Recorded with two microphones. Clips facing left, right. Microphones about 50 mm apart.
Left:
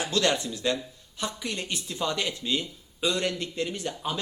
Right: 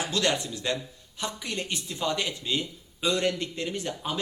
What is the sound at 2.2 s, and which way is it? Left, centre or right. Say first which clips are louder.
A man's voice: left 1 dB; centre.